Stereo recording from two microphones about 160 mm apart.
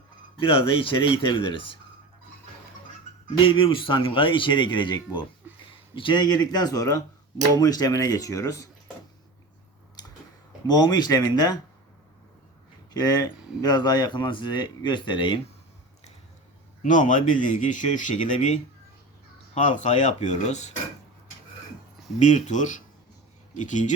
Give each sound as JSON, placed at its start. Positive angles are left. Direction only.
{"t": 0.3, "sound": "speech", "side_deg": 30}
{"t": 3.4, "sound": "speech", "side_deg": 30}
{"t": 10.7, "sound": "speech", "side_deg": 25}
{"t": 12.9, "sound": "speech", "side_deg": 25}
{"t": 16.8, "sound": "speech", "side_deg": 50}
{"t": 22.2, "sound": "speech", "side_deg": 45}